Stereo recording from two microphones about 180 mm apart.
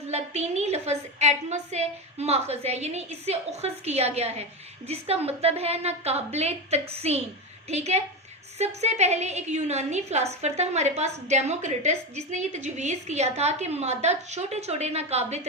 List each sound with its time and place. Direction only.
0.1 s a woman's voice: 40° right (ahead or behind)